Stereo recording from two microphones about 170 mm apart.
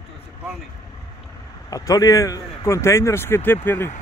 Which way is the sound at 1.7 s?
20° left (ahead or behind).